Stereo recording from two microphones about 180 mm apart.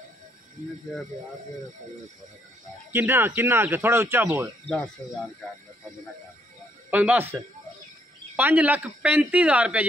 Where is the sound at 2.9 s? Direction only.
10° right (ahead or behind).